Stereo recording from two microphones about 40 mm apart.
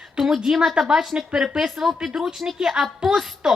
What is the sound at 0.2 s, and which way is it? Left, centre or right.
A woman's voice, centre.